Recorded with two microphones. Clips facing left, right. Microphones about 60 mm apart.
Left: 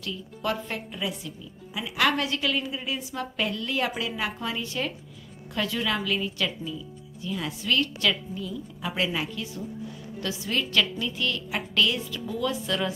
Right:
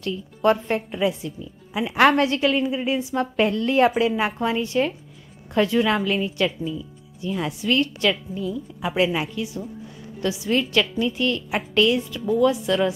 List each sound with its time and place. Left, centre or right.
0.0 s a woman's voice: right